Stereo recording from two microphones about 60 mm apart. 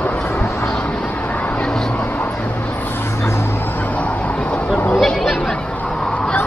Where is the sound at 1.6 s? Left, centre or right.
Centre.